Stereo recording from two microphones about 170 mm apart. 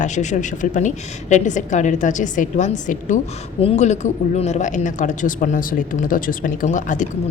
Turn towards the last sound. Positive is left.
turn(degrees=50)  # may be behind; listen again after turning